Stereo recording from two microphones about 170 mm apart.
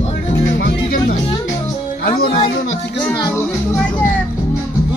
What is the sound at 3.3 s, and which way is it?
Speech, 15° left (ahead or behind).